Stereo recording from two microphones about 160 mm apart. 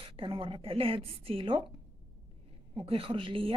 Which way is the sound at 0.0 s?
35° right (ahead or behind).